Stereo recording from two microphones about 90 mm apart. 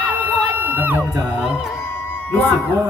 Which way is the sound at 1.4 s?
10° right (ahead or behind).